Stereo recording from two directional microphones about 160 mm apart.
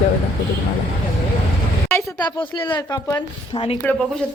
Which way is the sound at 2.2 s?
30° left (ahead or behind).